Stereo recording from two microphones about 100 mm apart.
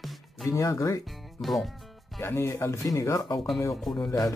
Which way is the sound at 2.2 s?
25° left (ahead or behind).